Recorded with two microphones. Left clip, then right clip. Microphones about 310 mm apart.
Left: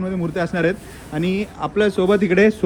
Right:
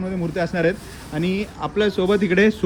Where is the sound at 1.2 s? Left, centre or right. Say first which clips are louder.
Left 2 dB; centre.